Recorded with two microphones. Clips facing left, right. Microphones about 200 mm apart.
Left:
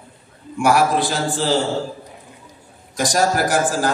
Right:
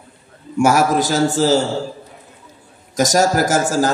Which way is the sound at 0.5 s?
45° right (ahead or behind).